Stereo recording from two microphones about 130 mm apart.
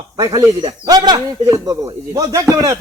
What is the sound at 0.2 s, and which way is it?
A man's voice, 30° right (ahead or behind).